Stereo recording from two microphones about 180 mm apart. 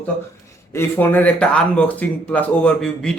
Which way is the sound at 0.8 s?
10° left (ahead or behind).